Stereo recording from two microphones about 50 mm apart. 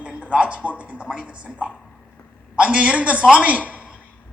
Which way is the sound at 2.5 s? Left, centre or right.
Right.